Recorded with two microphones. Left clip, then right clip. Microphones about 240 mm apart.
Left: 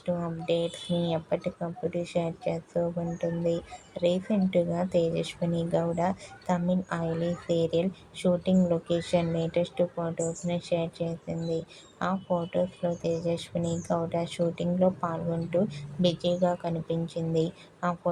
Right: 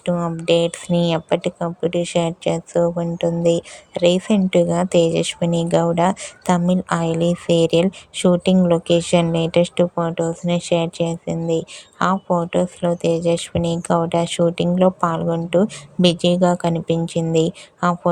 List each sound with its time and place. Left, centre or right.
0.0 s speech: right